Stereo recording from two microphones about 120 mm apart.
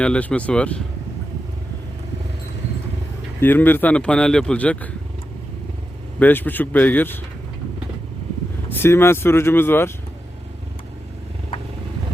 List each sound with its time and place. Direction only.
0.0 s speech: 10° left (ahead or behind)
3.4 s speech: 15° left (ahead or behind)
6.1 s speech: 15° left (ahead or behind)
8.7 s speech: 20° left (ahead or behind)